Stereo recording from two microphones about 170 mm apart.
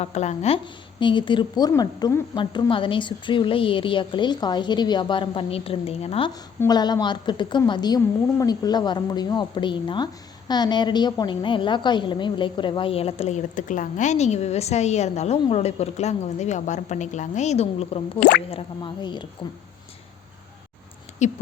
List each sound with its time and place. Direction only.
0.0 s a woman's voice: 40° left (ahead or behind)
6.6 s a woman's voice: 25° left (ahead or behind)
18.2 s speech: 75° left (ahead or behind)
18.5 s a woman's voice: 25° left (ahead or behind)
21.2 s speech: 45° left (ahead or behind)